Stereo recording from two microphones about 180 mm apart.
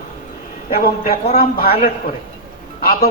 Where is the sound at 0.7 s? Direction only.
55° left (ahead or behind).